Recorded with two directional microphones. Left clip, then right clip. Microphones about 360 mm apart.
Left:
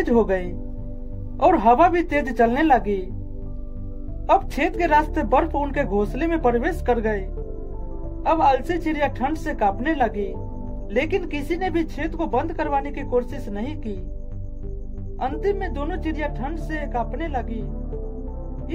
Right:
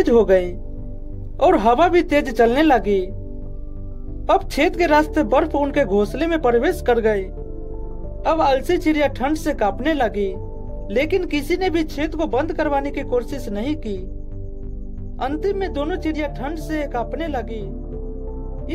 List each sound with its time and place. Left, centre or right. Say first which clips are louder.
0.0 s speech: right 6 dB; right
4.3 s speech: right 2 dB; right
15.1 s speech: right 2 dB; right